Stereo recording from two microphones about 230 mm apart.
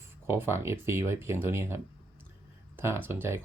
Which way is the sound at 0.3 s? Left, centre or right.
Centre.